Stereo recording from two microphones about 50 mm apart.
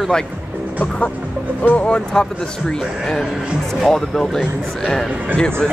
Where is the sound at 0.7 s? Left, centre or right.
Left.